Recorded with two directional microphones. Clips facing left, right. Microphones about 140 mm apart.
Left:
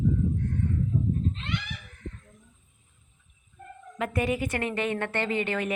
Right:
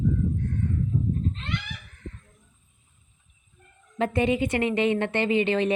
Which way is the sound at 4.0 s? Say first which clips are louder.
Right 4 dB; 25° right (ahead or behind).